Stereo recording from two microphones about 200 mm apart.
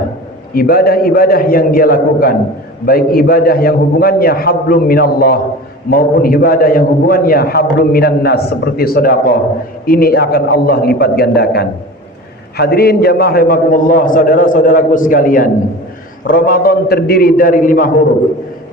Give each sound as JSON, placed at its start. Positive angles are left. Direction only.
{"t": 0.5, "sound": "a man's voice", "side_deg": 45}